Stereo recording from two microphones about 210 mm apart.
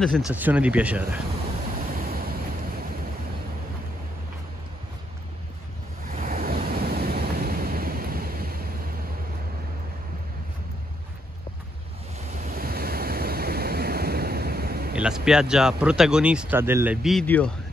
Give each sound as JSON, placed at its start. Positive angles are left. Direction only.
{"t": 0.0, "sound": "speech", "side_deg": 0}
{"t": 2.0, "sound": "waves", "side_deg": -45}
{"t": 6.0, "sound": "waves", "side_deg": -40}
{"t": 12.4, "sound": "waves", "side_deg": -40}
{"t": 15.0, "sound": "speech", "side_deg": -5}